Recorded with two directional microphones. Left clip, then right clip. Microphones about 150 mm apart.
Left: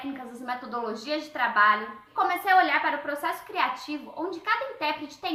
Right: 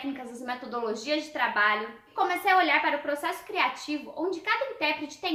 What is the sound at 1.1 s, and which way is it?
Speech, 20° right (ahead or behind).